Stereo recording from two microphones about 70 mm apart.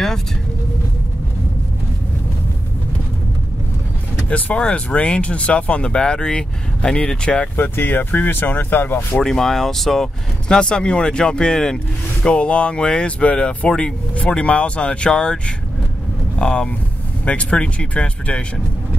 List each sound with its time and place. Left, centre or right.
4.3 s speech: left
7.5 s speech: left
9.2 s speech: centre